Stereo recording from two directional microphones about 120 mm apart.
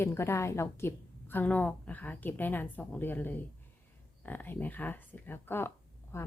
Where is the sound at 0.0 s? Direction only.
20° left (ahead or behind).